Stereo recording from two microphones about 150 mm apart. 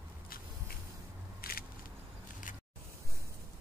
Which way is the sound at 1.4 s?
90° left.